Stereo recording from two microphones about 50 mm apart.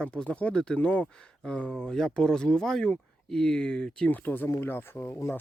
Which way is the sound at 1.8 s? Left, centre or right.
Centre.